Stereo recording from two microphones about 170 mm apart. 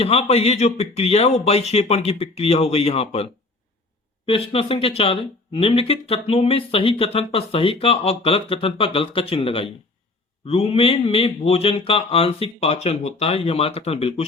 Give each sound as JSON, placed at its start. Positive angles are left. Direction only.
{"t": 0.0, "sound": "speech", "side_deg": 35}
{"t": 4.3, "sound": "speech", "side_deg": 35}